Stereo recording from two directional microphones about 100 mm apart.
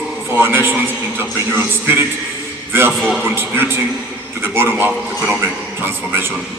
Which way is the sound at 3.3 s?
25° right (ahead or behind).